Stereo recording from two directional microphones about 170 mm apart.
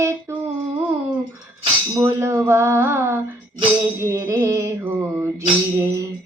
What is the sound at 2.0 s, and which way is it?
Music, 15° right (ahead or behind).